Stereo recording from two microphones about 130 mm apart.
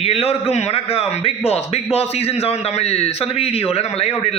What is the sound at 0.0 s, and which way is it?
A man's voice, 50° left (ahead or behind).